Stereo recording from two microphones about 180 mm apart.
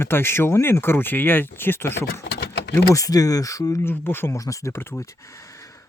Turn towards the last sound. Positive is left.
turn(degrees=15)  # may be behind; listen again after turning